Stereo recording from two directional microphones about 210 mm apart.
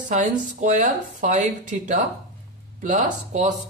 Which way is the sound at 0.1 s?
35° right (ahead or behind).